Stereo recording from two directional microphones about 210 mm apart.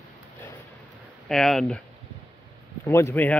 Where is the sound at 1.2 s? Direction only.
Centre (ahead or behind).